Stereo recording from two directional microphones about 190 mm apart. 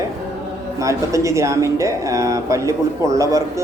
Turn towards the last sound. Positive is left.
turn(degrees=-15)  # may be behind; listen again after turning